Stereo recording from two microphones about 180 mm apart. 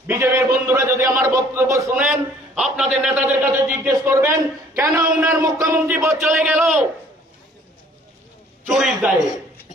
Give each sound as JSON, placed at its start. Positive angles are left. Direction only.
{"t": 0.1, "sound": "speech", "side_deg": -15}
{"t": 0.7, "sound": "a sound", "side_deg": -15}
{"t": 5.4, "sound": "speech", "side_deg": -15}
{"t": 6.1, "sound": "a man's voice", "side_deg": -5}
{"t": 8.7, "sound": "a man's voice", "side_deg": -5}